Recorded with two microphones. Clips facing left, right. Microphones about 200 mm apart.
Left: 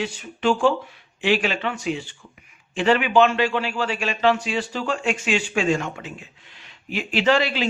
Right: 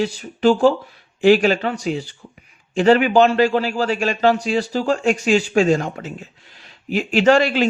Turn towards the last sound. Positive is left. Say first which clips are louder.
# right 6 dB
turn(degrees=-50)  # may be behind; listen again after turning